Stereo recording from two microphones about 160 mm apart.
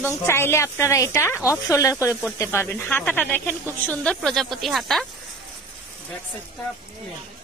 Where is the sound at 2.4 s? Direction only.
15° left (ahead or behind).